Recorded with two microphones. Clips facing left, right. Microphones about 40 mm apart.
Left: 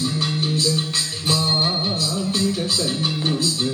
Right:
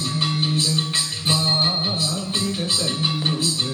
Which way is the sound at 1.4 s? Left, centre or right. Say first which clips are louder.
Even; centre.